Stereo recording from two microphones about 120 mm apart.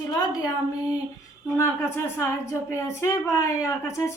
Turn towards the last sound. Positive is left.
turn(degrees=25)  # may be behind; listen again after turning